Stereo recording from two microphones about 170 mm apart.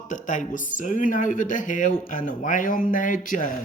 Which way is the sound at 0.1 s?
50° left (ahead or behind).